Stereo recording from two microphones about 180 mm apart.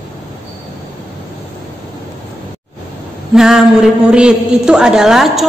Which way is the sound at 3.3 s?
5° right (ahead or behind).